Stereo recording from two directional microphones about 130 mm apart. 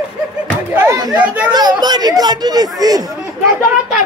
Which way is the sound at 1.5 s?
30° right (ahead or behind).